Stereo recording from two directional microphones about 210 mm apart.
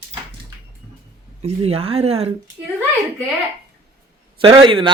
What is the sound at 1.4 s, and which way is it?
Speech, 30° right (ahead or behind).